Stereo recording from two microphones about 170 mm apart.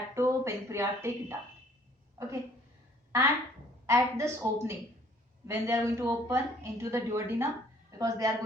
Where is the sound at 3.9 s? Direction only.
15° right (ahead or behind).